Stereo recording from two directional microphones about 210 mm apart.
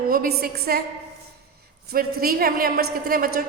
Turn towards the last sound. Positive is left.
turn(degrees=-45)  # may be behind; listen again after turning